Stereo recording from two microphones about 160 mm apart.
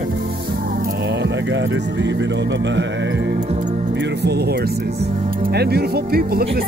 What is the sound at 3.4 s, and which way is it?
Music, 45° right (ahead or behind).